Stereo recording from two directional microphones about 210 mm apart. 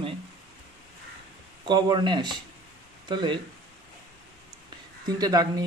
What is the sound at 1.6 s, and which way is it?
Speech, 20° right (ahead or behind).